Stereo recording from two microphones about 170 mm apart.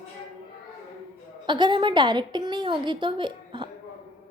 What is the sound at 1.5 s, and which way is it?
A woman's voice, 25° right (ahead or behind).